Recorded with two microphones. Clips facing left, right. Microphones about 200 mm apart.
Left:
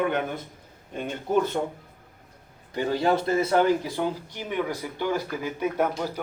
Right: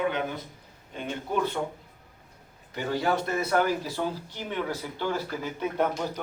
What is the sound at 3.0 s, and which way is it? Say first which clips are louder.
A man's voice: left 5 dB; 25° left (ahead or behind).